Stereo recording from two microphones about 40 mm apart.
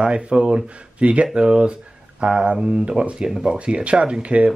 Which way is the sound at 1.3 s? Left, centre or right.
Right.